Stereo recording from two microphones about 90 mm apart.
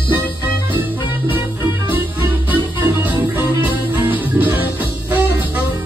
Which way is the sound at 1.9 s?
20° right (ahead or behind).